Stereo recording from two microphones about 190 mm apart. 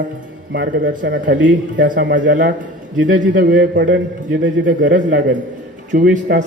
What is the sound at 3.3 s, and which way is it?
Speech, 50° right (ahead or behind).